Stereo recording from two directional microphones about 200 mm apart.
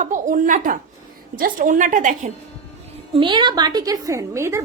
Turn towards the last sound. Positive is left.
turn(degrees=-15)  # may be behind; listen again after turning